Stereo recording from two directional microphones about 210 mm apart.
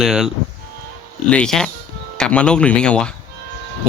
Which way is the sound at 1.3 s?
5° left (ahead or behind).